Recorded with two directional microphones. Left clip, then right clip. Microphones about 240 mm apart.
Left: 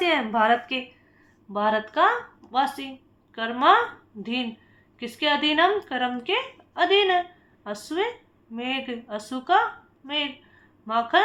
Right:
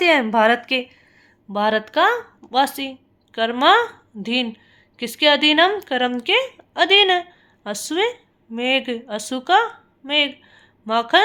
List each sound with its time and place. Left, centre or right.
0.0 s speech: right